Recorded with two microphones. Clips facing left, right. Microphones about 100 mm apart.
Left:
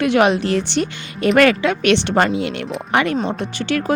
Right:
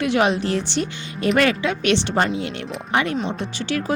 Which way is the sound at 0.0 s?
60° left (ahead or behind).